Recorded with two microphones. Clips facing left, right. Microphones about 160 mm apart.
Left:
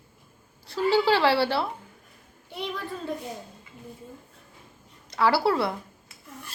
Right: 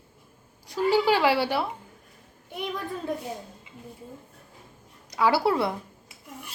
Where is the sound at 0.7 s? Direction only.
15° right (ahead or behind).